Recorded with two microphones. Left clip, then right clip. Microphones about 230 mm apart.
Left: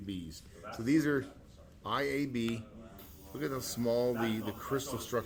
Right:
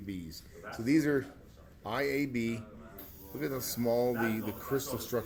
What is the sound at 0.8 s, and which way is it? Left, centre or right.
Speech, centre.